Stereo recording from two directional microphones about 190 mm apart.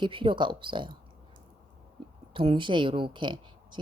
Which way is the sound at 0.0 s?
25° right (ahead or behind).